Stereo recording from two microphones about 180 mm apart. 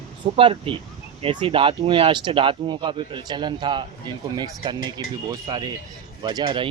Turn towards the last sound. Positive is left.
turn(degrees=-25)  # may be behind; listen again after turning